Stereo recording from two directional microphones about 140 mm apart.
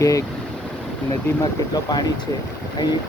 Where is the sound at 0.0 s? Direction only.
25° left (ahead or behind).